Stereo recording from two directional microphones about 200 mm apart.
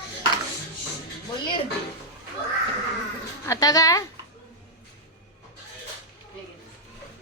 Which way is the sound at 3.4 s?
15° left (ahead or behind).